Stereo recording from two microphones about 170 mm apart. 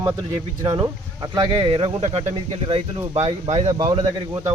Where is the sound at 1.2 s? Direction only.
30° right (ahead or behind).